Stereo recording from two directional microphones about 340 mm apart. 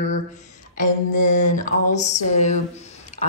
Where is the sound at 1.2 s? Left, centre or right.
Left.